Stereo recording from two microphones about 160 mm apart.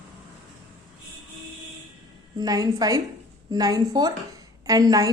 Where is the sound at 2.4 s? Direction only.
25° right (ahead or behind).